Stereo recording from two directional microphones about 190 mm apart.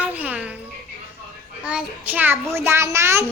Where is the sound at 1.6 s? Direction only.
5° right (ahead or behind).